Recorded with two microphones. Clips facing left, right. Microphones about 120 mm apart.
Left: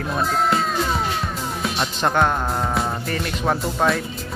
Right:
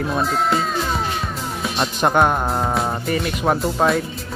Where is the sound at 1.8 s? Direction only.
15° right (ahead or behind).